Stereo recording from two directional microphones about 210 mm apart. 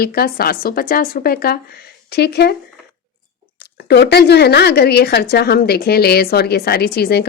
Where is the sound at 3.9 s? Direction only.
50° left (ahead or behind).